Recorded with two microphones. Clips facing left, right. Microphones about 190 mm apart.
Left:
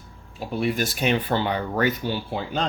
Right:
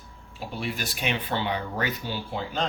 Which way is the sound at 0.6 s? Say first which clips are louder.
Left 7 dB; 50° left (ahead or behind).